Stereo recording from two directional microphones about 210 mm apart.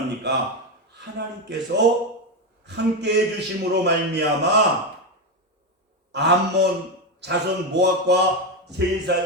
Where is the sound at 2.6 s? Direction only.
55° right (ahead or behind).